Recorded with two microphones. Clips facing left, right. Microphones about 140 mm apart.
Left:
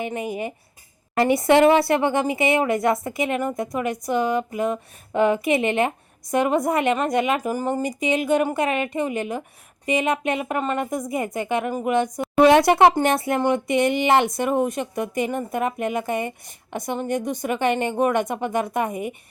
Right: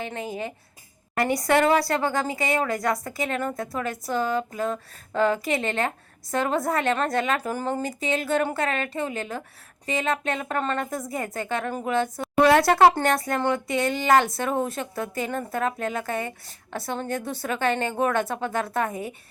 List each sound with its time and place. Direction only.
0.0 s a woman's voice: 15° left (ahead or behind)
1.1 s a woman's voice: 25° left (ahead or behind)